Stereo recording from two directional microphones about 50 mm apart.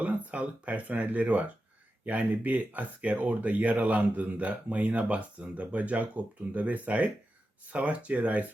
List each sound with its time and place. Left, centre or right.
0.0 s speech: right